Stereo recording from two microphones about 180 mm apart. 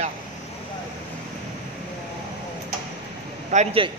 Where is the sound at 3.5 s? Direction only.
45° right (ahead or behind).